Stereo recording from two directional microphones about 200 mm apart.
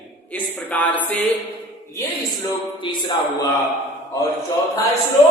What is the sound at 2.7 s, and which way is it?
Music, 25° left (ahead or behind).